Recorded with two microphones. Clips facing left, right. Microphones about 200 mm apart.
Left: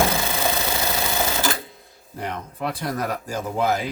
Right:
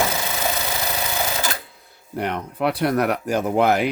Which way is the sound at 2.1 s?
70° right (ahead or behind).